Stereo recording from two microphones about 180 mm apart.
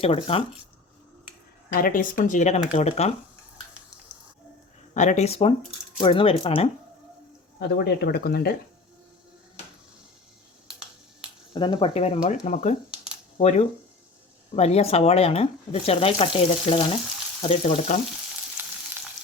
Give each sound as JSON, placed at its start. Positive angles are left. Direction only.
{"t": 0.0, "sound": "speech", "side_deg": 30}
{"t": 1.7, "sound": "speech", "side_deg": 50}
{"t": 4.9, "sound": "speech", "side_deg": 40}
{"t": 7.8, "sound": "speech", "side_deg": 60}
{"t": 11.5, "sound": "speech", "side_deg": 25}